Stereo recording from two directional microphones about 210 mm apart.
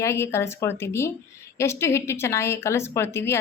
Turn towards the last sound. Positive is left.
turn(degrees=10)  # may be behind; listen again after turning